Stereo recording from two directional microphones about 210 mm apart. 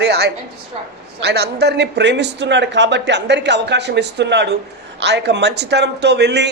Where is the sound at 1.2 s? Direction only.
55° right (ahead or behind).